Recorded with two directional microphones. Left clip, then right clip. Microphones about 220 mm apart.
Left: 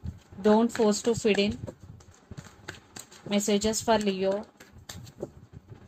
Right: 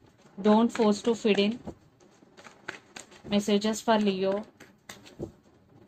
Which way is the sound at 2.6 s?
30° left (ahead or behind).